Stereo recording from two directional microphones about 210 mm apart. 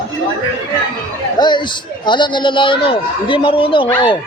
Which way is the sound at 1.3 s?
20° left (ahead or behind).